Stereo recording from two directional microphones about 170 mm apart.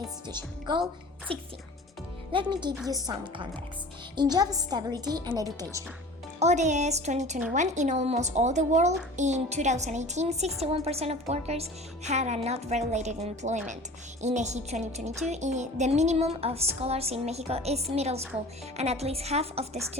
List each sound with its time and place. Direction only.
0.3 s a woman's voice: 25° right (ahead or behind)
6.4 s a woman's voice: 45° right (ahead or behind)